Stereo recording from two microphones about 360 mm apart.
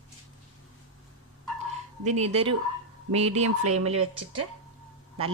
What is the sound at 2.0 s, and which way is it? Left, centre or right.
Speech, centre.